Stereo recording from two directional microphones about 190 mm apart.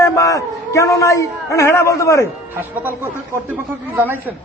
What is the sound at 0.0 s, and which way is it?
Speech, 15° left (ahead or behind).